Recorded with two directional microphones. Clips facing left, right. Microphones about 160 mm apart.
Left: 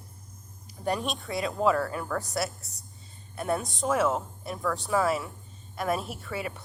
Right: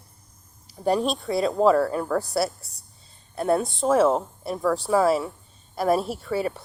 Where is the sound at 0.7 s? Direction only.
35° right (ahead or behind).